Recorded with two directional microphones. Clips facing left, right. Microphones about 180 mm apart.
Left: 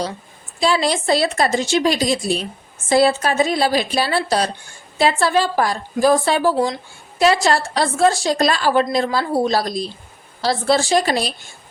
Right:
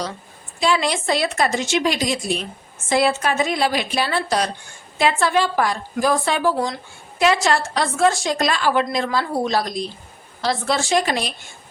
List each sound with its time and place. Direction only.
0.6 s speech: 35° left (ahead or behind)